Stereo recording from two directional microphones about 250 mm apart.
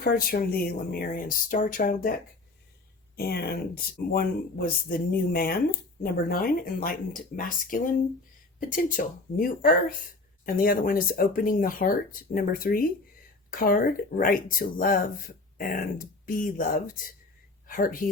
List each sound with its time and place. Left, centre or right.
0.0 s speech: left
3.2 s speech: left
9.0 s speech: left